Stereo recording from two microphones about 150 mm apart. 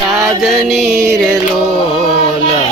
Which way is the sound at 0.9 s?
20° right (ahead or behind).